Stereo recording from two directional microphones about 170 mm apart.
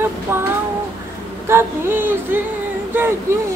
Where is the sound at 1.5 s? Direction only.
10° right (ahead or behind).